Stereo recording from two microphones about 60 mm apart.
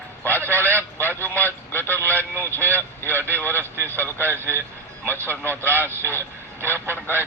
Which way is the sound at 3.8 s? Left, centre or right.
Left.